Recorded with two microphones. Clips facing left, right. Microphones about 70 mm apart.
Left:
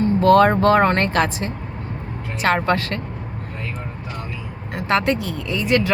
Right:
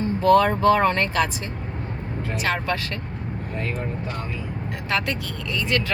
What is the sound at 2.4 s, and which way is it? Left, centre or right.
Speech, left.